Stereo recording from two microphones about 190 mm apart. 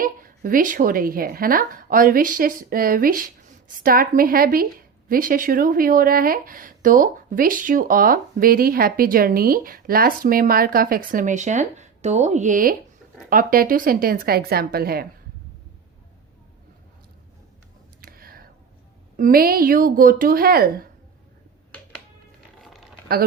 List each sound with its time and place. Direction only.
0.0 s speech: 45° right (ahead or behind)
18.0 s a sound: 50° right (ahead or behind)
19.1 s speech: 45° right (ahead or behind)
22.5 s crumpling: centre (ahead or behind)